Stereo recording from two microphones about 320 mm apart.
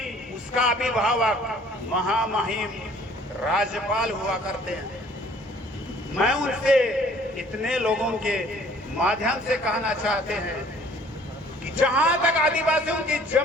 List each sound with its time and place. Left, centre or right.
0.5 s a man's voice: centre
6.2 s a man's voice: centre
11.8 s a man's voice: centre